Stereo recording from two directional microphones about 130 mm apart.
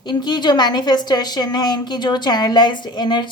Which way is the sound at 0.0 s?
35° left (ahead or behind).